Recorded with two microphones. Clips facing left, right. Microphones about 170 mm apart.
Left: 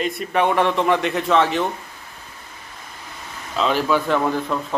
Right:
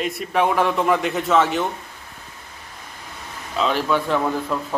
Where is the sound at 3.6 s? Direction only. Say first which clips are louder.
Left 1 dB; centre (ahead or behind).